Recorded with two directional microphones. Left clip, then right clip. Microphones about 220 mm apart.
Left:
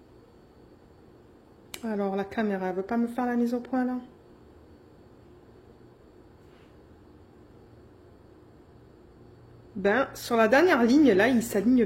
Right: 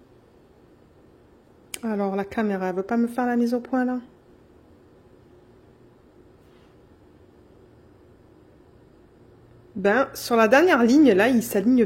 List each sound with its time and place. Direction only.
1.7 s speech: 25° right (ahead or behind)
9.8 s speech: 25° right (ahead or behind)